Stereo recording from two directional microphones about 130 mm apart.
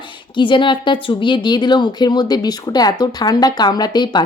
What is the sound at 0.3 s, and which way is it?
A woman's voice, 40° left (ahead or behind).